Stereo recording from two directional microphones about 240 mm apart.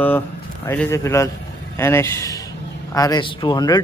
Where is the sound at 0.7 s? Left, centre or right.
Centre.